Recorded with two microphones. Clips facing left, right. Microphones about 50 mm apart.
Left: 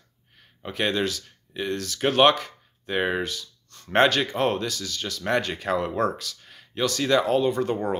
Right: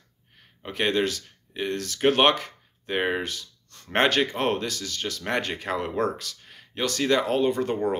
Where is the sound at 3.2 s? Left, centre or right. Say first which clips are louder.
Left 2 dB; right.